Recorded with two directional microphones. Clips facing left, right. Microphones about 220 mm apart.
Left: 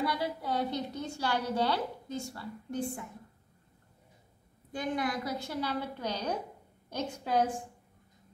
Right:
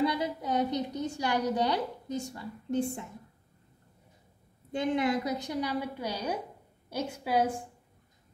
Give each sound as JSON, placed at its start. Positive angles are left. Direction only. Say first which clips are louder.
{"t": 0.0, "sound": "a woman's voice", "louder": "right 4 dB", "side_deg": -20}
{"t": 4.7, "sound": "a woman's voice", "louder": "right 5 dB", "side_deg": -25}